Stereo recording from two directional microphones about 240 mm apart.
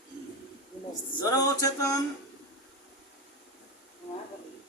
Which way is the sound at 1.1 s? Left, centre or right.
Centre.